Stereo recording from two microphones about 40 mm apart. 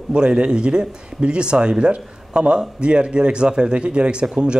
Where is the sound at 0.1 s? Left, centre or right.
Right.